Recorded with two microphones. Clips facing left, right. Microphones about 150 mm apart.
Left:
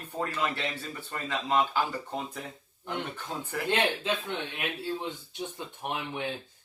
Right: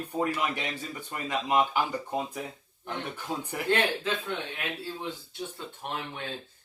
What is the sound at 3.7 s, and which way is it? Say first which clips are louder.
Speech: right 1 dB; 20° left (ahead or behind).